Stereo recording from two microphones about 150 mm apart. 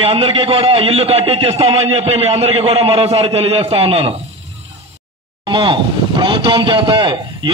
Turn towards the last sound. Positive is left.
turn(degrees=-30)  # may be behind; listen again after turning